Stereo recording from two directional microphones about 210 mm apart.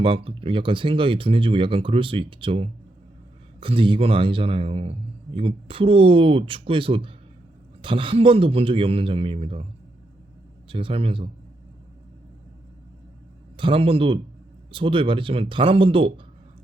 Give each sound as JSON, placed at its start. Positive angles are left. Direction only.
{"t": 0.0, "sound": "a man's voice", "side_deg": -25}
{"t": 10.7, "sound": "a man's voice", "side_deg": -25}
{"t": 13.6, "sound": "a man's voice", "side_deg": -25}